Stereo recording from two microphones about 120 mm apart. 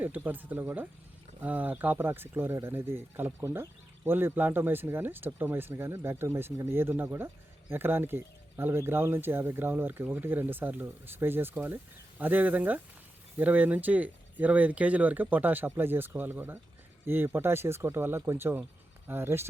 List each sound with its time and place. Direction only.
0.0 s speech: 15° right (ahead or behind)